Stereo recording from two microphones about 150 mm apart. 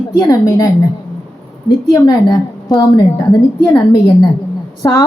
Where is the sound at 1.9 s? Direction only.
25° left (ahead or behind).